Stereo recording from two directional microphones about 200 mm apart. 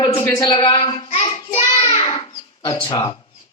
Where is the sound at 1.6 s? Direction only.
20° left (ahead or behind).